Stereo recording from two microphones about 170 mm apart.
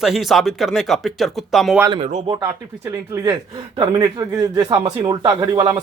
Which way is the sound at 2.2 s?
25° right (ahead or behind).